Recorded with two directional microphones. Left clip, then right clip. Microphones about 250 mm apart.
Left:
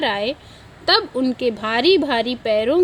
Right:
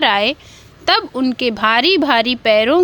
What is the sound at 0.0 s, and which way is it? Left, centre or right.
Speech, right.